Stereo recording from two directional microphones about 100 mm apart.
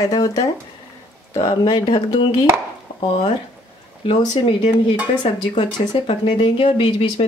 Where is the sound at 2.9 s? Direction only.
65° left (ahead or behind).